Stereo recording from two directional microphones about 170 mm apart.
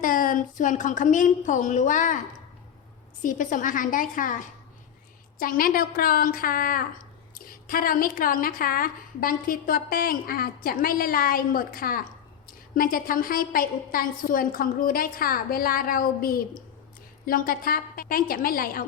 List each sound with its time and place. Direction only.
0.0 s a woman's voice: 55° left (ahead or behind)
3.2 s a woman's voice: 50° left (ahead or behind)